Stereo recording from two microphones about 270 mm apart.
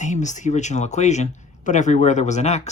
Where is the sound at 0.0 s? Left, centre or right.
Left.